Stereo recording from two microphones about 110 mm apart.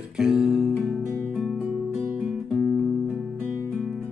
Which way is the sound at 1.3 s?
10° left (ahead or behind).